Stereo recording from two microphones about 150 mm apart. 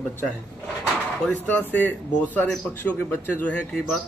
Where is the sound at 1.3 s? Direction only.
10° left (ahead or behind).